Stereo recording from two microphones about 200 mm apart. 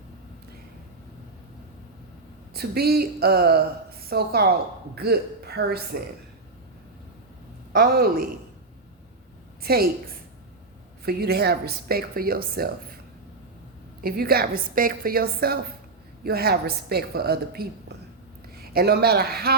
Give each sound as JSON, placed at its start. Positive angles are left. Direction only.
{"t": 2.5, "sound": "a woman's voice", "side_deg": -50}
{"t": 7.7, "sound": "a woman's voice", "side_deg": -50}
{"t": 9.6, "sound": "a woman's voice", "side_deg": -50}
{"t": 11.0, "sound": "a woman's voice", "side_deg": -50}
{"t": 14.0, "sound": "a woman's voice", "side_deg": -50}